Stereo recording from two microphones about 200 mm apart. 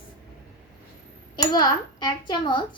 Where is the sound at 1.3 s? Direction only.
20° left (ahead or behind).